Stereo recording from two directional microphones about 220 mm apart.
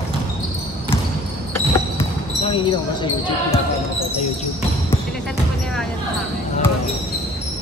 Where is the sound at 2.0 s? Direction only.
25° left (ahead or behind).